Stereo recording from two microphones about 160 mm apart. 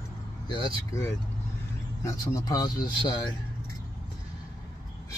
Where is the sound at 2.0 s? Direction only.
25° left (ahead or behind).